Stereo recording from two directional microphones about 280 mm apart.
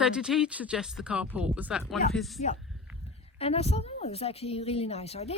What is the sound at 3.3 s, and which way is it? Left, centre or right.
A woman's voice, left.